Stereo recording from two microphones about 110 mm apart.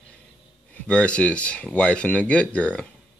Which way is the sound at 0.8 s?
10° left (ahead or behind).